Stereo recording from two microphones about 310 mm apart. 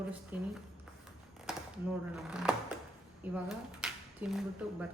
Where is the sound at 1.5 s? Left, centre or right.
Centre.